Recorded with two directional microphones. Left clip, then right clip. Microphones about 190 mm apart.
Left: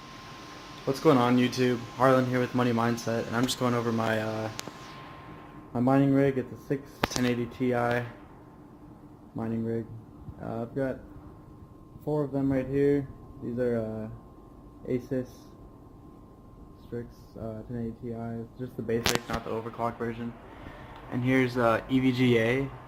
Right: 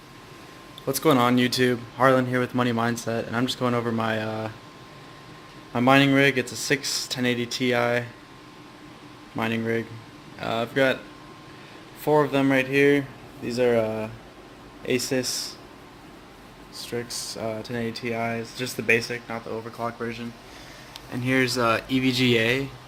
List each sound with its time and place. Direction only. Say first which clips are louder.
0.9 s speech: right 3 dB; 5° right (ahead or behind)
3.8 s speech: right 2 dB; 10° right (ahead or behind)
5.7 s speech: right 6 dB; 20° right (ahead or behind)
9.3 s speech: right 7 dB; 20° right (ahead or behind)
12.0 s speech: right 9 dB; 25° right (ahead or behind)
16.9 s speech: right 9 dB; 15° right (ahead or behind)
19.3 s speech: right 1 dB; 5° right (ahead or behind)